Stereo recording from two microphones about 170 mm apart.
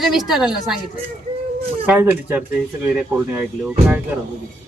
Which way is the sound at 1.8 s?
10° right (ahead or behind).